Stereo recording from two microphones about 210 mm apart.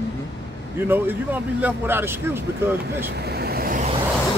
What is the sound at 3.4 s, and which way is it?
Vehicle, 45° right (ahead or behind).